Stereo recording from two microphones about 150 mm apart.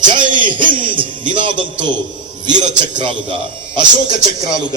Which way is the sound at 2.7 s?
30° right (ahead or behind).